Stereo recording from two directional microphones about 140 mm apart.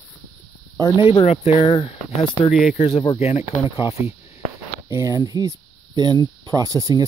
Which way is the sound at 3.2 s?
50° left (ahead or behind).